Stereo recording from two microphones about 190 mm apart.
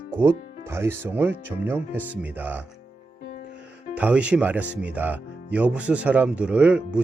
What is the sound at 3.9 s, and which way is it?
Speech, 5° right (ahead or behind).